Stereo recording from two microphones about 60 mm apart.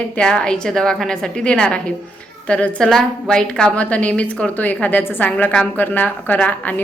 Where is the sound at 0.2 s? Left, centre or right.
Centre.